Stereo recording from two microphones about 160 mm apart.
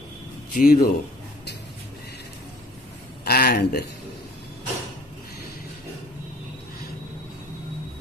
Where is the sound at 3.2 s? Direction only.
90° left.